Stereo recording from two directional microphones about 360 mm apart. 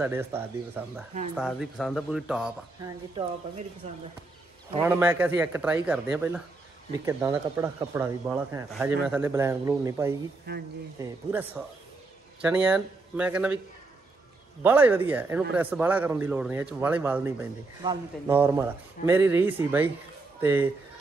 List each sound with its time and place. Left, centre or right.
0.0 s speech: centre
4.8 s speech: centre
10.5 s speech: right
11.0 s speech: centre
14.6 s speech: centre